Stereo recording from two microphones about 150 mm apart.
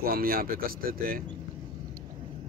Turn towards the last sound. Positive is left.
turn(degrees=-75)  # may be behind; listen again after turning